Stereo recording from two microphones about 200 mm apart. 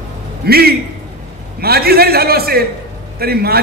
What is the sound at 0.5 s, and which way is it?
A man's voice, 50° right (ahead or behind).